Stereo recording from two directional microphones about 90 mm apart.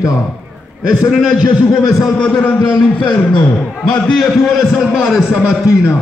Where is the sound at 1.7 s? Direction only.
45° left (ahead or behind).